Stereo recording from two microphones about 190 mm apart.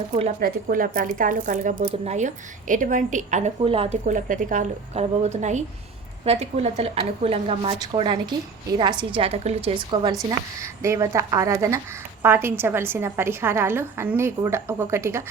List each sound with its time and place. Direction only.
0.3 s a woman's voice: 50° right (ahead or behind); by 15.2 s 15° right (ahead or behind)